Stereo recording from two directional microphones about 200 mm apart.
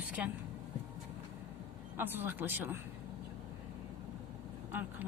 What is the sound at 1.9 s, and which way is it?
Speech, 10° right (ahead or behind).